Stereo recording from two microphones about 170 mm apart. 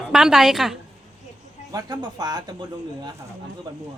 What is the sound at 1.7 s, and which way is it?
Speech, 20° right (ahead or behind).